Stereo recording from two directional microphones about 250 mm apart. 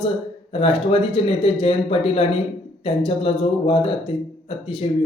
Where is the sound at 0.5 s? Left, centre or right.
Left.